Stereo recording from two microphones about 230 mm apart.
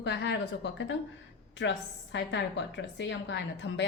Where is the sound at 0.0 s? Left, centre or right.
Left.